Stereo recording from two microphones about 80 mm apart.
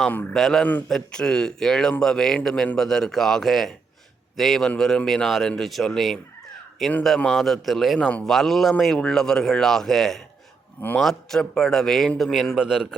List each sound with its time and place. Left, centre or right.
0.3 s a man's voice: centre
0.6 s a man's voice: left
0.9 s a man's voice: centre
7.9 s a man's voice: centre
8.2 s a man's voice: centre
10.8 s a man's voice: left
11.0 s a man's voice: centre